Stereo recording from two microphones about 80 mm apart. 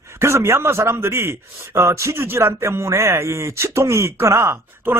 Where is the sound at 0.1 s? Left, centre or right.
Right.